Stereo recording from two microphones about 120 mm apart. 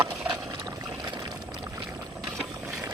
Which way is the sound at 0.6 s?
35° right (ahead or behind).